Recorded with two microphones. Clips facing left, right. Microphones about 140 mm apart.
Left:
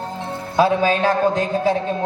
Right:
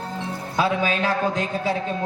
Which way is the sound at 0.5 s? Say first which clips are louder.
Left 6 dB; 35° left (ahead or behind).